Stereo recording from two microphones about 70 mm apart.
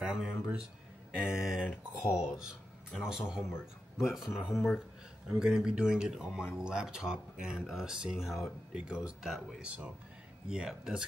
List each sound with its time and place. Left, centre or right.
0.0 s speech: centre
9.6 s speech: centre